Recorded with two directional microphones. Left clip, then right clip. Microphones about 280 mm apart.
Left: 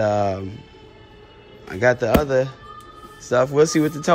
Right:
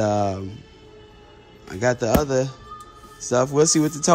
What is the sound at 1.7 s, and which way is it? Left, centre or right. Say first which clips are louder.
Speech: left 3 dB; centre.